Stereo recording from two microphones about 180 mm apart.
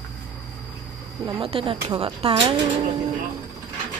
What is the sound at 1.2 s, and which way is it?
Speech, 30° right (ahead or behind).